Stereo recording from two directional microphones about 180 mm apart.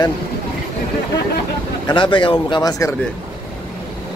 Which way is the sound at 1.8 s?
25° left (ahead or behind).